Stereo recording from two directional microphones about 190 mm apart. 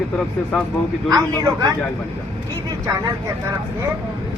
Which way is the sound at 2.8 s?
15° right (ahead or behind).